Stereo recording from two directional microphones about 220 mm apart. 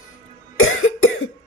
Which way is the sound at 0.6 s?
70° left (ahead or behind).